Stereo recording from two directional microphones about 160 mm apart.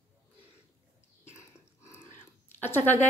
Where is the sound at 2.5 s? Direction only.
15° left (ahead or behind).